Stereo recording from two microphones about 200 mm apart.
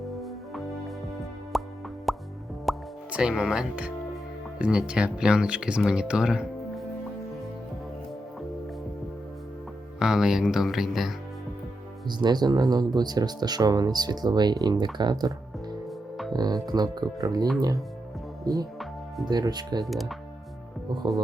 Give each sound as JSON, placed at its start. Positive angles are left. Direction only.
{"t": 0.2, "sound": "music", "side_deg": 0}
{"t": 1.5, "sound": "plop", "side_deg": 0}
{"t": 2.6, "sound": "speech", "side_deg": -5}
{"t": 10.0, "sound": "speech", "side_deg": 0}
{"t": 12.0, "sound": "speech", "side_deg": -20}
{"t": 16.3, "sound": "speech", "side_deg": -20}
{"t": 19.8, "sound": "speech", "side_deg": 0}